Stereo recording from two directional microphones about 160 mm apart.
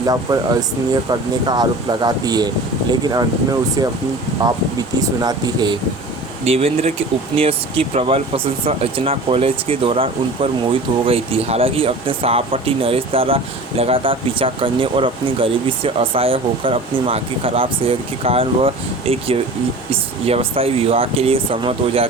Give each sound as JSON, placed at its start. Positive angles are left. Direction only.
{"t": 0.0, "sound": "speech", "side_deg": -25}
{"t": 4.9, "sound": "speech", "side_deg": -25}
{"t": 6.4, "sound": "speech", "side_deg": -40}